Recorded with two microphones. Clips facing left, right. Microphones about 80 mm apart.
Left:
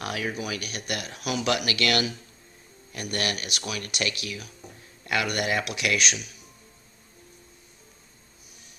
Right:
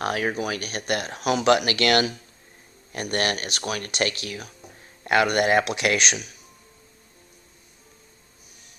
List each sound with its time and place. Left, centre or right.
0.0 s speech: right